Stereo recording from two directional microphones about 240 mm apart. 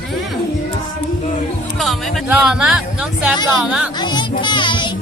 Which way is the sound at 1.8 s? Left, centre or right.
Centre.